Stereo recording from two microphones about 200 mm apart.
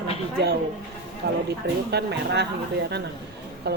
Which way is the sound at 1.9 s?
55° right (ahead or behind).